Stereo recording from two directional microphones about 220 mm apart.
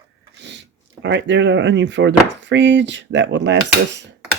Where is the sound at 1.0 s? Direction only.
55° right (ahead or behind).